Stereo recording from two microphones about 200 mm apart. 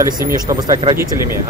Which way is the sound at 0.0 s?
15° right (ahead or behind).